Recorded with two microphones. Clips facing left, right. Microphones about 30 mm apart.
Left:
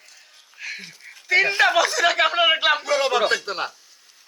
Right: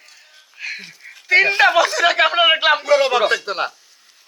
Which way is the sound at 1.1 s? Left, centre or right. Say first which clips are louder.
Right 4 dB; right.